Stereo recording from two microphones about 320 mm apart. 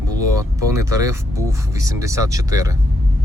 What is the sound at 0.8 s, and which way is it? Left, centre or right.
Speech, centre.